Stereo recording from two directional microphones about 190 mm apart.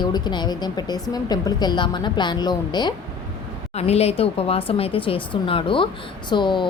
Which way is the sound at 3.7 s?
35° left (ahead or behind).